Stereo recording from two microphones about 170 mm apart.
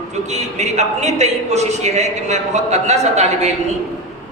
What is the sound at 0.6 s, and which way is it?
A man's voice, 40° right (ahead or behind).